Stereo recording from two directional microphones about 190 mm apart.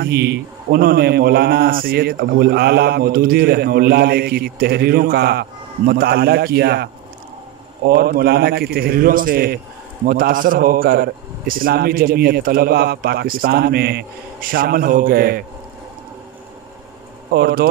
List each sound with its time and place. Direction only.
0.0 s speech: 60° right (ahead or behind)
7.9 s a man's voice: 55° right (ahead or behind)
17.3 s speech: 55° right (ahead or behind)